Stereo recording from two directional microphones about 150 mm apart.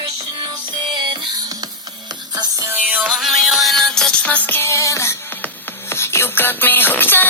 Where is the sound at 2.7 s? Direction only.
10° right (ahead or behind).